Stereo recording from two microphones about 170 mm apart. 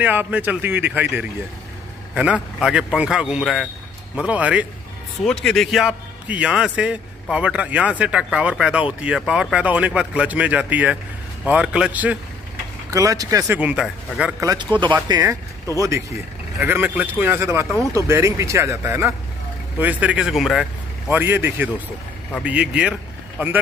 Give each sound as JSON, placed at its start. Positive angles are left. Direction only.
{"t": 0.0, "sound": "a man's voice", "side_deg": -10}
{"t": 5.2, "sound": "a man's voice", "side_deg": 5}
{"t": 12.9, "sound": "speech", "side_deg": -20}
{"t": 13.6, "sound": "a man's voice", "side_deg": -5}
{"t": 14.4, "sound": "speech", "side_deg": -20}
{"t": 16.5, "sound": "a man's voice", "side_deg": -15}
{"t": 21.1, "sound": "a man's voice", "side_deg": -10}